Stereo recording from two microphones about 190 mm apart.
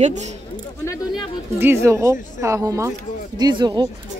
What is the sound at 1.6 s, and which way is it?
Speech, 15° right (ahead or behind).